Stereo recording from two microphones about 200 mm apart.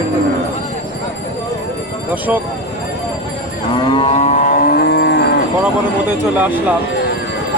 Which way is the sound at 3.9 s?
30° left (ahead or behind).